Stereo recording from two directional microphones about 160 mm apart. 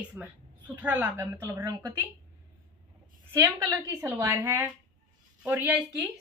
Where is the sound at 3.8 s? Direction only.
15° right (ahead or behind).